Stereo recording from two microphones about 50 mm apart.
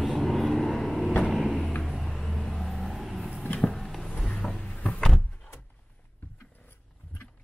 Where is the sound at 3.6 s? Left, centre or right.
Centre.